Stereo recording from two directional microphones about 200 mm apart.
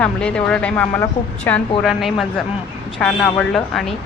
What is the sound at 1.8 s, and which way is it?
Speech, centre (ahead or behind).